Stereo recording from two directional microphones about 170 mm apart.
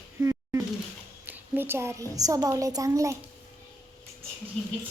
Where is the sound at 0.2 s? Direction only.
20° right (ahead or behind).